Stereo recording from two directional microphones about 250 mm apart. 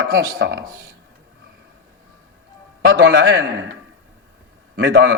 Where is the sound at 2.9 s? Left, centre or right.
Right.